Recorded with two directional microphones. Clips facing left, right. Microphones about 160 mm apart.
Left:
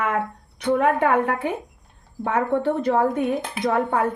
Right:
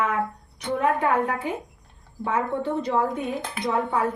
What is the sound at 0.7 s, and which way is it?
A woman's voice, 60° left (ahead or behind).